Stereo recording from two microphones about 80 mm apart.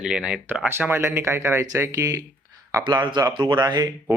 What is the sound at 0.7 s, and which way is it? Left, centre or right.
Speech, right.